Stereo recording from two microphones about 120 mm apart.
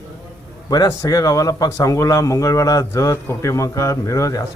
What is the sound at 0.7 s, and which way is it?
Speech, 30° left (ahead or behind).